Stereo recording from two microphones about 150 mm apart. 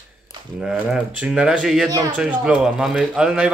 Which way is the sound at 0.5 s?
5° right (ahead or behind).